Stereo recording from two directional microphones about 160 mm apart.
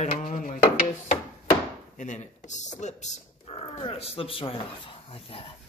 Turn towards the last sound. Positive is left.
turn(degrees=35)  # may be behind; listen again after turning